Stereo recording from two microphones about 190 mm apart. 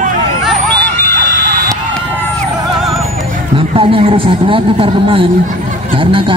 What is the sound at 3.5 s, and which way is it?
A man's voice, 30° right (ahead or behind).